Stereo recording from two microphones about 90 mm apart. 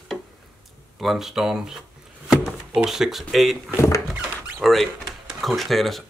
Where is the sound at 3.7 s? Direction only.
30° left (ahead or behind).